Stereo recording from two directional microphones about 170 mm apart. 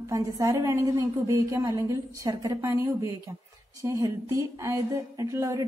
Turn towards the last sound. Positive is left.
turn(degrees=-20)  # may be behind; listen again after turning